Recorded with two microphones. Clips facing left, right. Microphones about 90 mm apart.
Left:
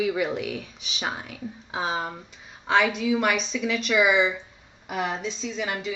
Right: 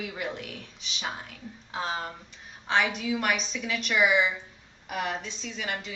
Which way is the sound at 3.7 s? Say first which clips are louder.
Left 3 dB; 90° left.